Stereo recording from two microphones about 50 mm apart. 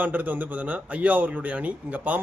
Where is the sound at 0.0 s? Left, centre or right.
Right.